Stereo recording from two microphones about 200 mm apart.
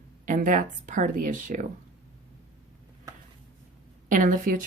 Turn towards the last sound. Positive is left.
turn(degrees=-40)  # may be behind; listen again after turning